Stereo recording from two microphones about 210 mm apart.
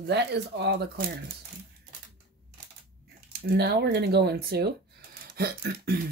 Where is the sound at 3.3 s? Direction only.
50° right (ahead or behind).